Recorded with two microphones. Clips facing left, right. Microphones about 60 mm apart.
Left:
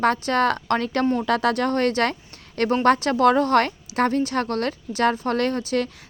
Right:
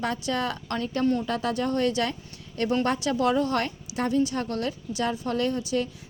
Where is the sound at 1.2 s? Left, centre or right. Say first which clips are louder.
Left 6 dB; left.